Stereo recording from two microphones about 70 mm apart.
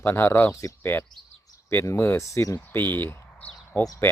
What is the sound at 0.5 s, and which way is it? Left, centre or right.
Speech, left.